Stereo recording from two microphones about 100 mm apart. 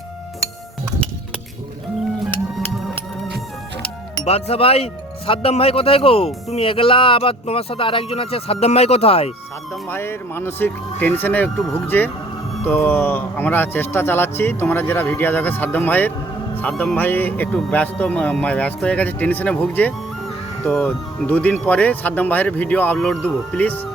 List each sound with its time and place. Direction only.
4.3 s speech: 90° left
9.9 s a man's voice: 25° left (ahead or behind)